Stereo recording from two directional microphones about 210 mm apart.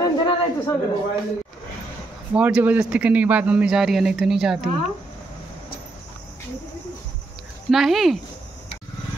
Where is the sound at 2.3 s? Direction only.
5° right (ahead or behind).